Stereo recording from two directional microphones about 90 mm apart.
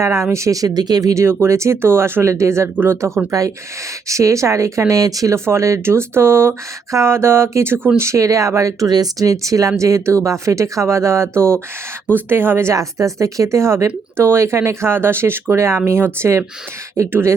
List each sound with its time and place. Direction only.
0.0 s speech: 30° right (ahead or behind)
3.3 s speech: 40° right (ahead or behind)